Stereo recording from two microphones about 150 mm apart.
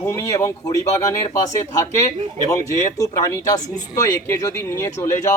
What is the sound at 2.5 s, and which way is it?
Speech, 20° left (ahead or behind).